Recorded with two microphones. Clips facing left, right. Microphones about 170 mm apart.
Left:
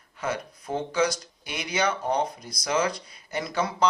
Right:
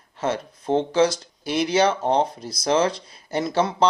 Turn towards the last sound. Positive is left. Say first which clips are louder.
# right 5 dB
turn(degrees=-25)  # may be behind; listen again after turning